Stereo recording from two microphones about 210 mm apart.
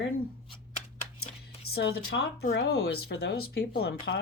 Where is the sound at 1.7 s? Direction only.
55° left (ahead or behind).